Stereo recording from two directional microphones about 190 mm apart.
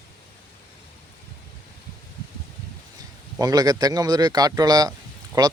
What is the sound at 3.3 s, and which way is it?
Speech, 20° right (ahead or behind).